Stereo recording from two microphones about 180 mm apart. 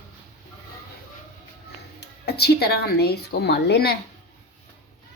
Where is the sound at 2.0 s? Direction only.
65° left (ahead or behind).